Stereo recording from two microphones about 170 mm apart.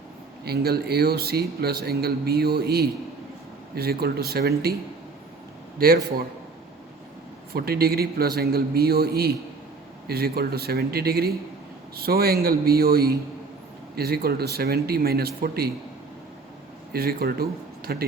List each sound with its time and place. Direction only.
0.4 s speech: 70° right (ahead or behind)
7.5 s a man's voice: 65° right (ahead or behind)
16.9 s speech: 65° right (ahead or behind)